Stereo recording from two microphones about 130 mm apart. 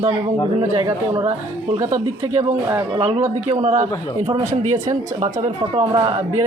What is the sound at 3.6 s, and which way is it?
Speech, 65° right (ahead or behind).